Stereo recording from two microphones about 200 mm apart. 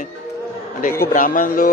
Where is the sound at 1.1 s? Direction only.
40° left (ahead or behind).